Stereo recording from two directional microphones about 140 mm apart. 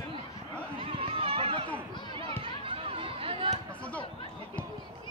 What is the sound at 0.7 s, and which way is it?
Run, 40° right (ahead or behind).